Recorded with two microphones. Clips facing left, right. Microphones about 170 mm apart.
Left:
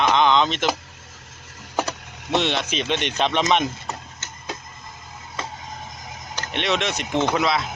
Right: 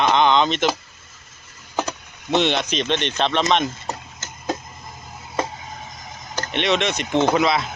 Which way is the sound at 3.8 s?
40° right (ahead or behind).